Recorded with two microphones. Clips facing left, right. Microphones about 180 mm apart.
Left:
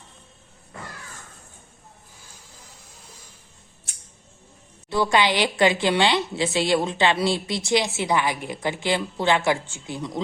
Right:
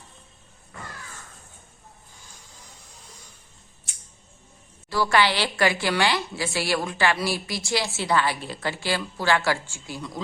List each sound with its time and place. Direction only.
4.9 s a woman's voice: 20° left (ahead or behind)